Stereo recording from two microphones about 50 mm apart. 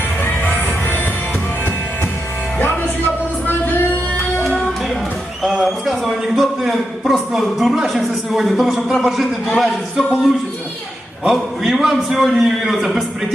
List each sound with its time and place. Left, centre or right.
3.4 s music: left
4.4 s music: centre
5.4 s a sound: centre
6.3 s a man's voice: centre
11.2 s a man's voice: centre